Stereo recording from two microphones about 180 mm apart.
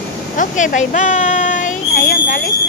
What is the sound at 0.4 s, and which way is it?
Speech, 45° left (ahead or behind).